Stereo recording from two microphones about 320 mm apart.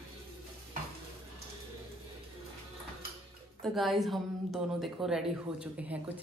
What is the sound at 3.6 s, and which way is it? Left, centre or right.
A woman's voice, centre.